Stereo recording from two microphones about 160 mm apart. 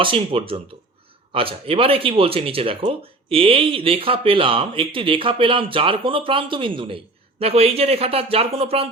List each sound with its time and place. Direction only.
0.0 s speech: 35° right (ahead or behind)